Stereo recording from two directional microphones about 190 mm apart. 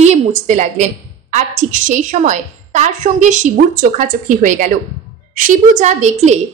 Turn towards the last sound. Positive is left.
turn(degrees=-40)  # may be behind; listen again after turning